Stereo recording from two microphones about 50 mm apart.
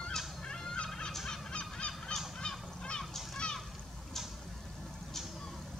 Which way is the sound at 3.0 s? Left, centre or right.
Centre.